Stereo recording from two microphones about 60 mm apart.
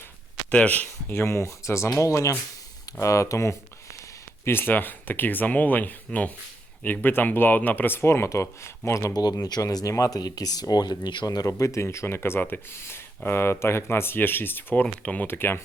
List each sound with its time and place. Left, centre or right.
0.5 s speech: left
1.1 s speech: left
1.9 s speech: left
4.4 s speech: left
9.1 s speech: left
15.0 s speech: left
15.3 s speech: left